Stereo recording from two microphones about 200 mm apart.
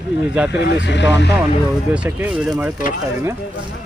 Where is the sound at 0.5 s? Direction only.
60° left (ahead or behind).